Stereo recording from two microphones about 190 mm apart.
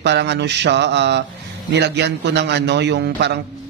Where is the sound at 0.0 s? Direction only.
65° right (ahead or behind).